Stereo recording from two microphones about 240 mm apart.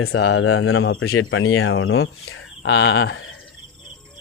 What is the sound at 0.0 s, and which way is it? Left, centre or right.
Speech, left.